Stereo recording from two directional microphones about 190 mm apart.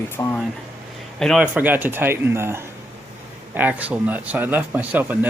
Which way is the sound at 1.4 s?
10° right (ahead or behind).